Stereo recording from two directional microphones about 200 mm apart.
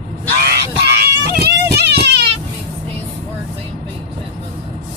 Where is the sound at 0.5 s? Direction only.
55° right (ahead or behind).